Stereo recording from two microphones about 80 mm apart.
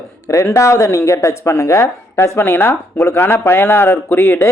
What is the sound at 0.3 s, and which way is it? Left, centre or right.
Speech, left.